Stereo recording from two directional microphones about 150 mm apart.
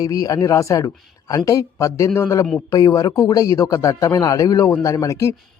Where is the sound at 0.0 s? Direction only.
25° left (ahead or behind).